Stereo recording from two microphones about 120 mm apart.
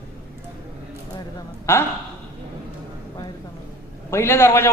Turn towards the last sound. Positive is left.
turn(degrees=20)  # may be behind; listen again after turning